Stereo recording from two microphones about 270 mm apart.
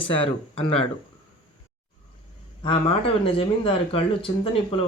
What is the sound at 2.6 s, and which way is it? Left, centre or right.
Speech, centre.